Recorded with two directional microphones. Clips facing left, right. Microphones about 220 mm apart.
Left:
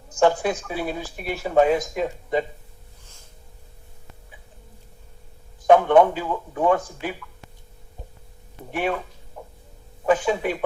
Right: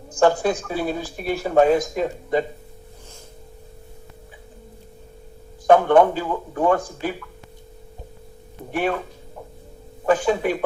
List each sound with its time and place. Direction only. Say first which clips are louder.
0.2 s speech: right 2 dB; 5° left (ahead or behind)
5.6 s speech: right 1 dB; centre (ahead or behind)
8.7 s speech: right 2 dB; centre (ahead or behind)
10.1 s speech: right 2 dB; centre (ahead or behind)